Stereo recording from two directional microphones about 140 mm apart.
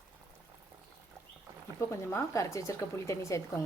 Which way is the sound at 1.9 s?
20° left (ahead or behind).